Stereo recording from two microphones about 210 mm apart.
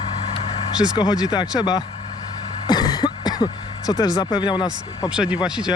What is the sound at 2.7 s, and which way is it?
Throat clearing, 20° left (ahead or behind).